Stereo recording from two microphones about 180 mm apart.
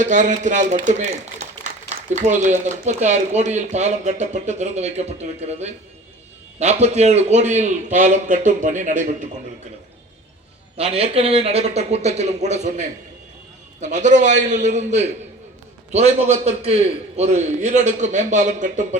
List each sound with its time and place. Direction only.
0.0 s speech: 45° right (ahead or behind)
10.8 s speech: 35° right (ahead or behind)